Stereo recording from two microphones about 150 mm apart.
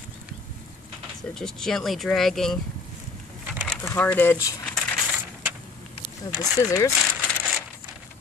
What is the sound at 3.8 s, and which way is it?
Speech, 10° left (ahead or behind).